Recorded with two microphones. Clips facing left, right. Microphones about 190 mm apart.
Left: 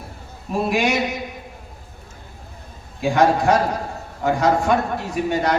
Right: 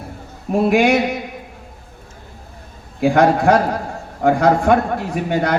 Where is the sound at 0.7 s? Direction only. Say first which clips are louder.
Right 6 dB; 60° right (ahead or behind).